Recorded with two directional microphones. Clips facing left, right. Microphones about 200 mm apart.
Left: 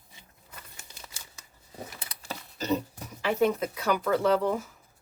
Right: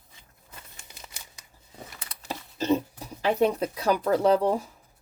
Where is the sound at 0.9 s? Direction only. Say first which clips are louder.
Right 1 dB; 15° right (ahead or behind).